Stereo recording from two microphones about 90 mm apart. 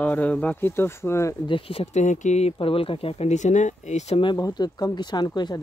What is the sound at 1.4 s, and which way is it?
Speech, 80° left.